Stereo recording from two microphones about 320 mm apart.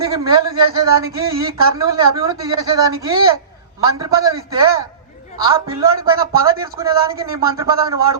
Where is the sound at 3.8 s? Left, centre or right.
Centre.